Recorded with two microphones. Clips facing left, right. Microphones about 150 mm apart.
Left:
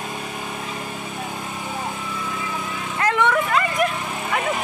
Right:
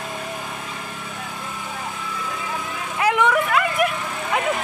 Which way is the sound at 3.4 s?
5° right (ahead or behind).